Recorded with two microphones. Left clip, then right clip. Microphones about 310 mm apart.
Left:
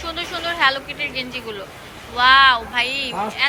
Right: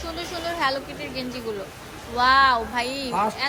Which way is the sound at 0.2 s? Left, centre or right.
Centre.